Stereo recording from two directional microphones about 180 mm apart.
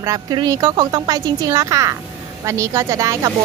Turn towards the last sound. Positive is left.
turn(degrees=-20)  # may be behind; listen again after turning